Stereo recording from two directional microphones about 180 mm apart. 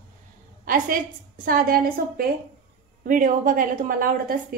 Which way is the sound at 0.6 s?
50° right (ahead or behind).